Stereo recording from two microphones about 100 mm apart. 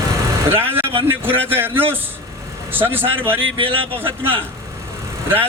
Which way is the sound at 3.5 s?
65° right (ahead or behind).